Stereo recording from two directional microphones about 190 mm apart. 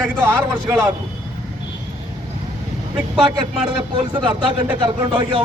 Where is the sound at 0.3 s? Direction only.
10° right (ahead or behind).